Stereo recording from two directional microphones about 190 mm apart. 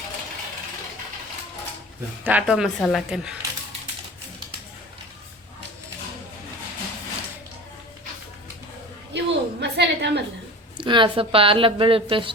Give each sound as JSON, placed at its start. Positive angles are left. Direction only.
{"t": 2.2, "sound": "speech", "side_deg": -5}
{"t": 9.1, "sound": "a sound", "side_deg": -65}
{"t": 10.8, "sound": "a woman's voice", "side_deg": -25}